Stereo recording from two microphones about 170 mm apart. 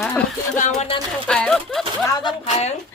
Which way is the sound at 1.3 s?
5° left (ahead or behind).